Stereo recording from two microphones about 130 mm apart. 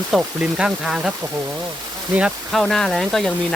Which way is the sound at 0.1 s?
10° right (ahead or behind).